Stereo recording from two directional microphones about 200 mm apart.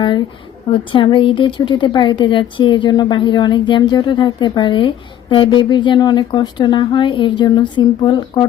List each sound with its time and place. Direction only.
0.7 s speech: 25° left (ahead or behind)